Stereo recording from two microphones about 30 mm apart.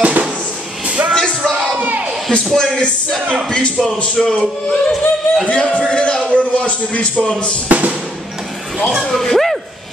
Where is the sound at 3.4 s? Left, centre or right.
Left.